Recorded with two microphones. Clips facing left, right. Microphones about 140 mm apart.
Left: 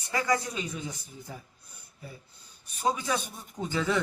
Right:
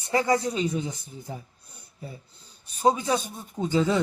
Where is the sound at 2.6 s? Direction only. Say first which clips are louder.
Right 6 dB; 30° right (ahead or behind).